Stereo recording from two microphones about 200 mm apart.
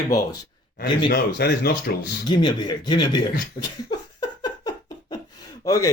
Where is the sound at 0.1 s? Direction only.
20° left (ahead or behind).